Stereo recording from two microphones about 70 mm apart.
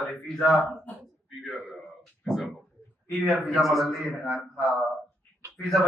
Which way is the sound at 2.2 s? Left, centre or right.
Centre.